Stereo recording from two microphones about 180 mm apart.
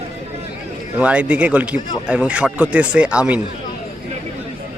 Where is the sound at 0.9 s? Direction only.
5° right (ahead or behind).